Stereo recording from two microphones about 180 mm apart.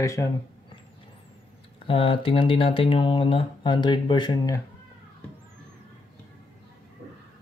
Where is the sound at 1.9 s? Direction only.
30° left (ahead or behind).